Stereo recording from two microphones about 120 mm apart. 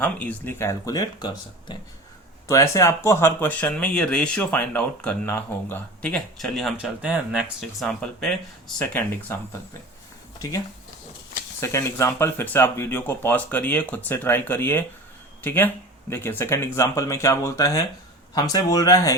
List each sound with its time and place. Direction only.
0.0 s speech: 15° left (ahead or behind); by 1.8 s 40° left (ahead or behind)
2.5 s speech: 25° left (ahead or behind); by 8.4 s 5° left (ahead or behind)
8.8 s speech: 15° left (ahead or behind)
11.6 s speech: 25° left (ahead or behind)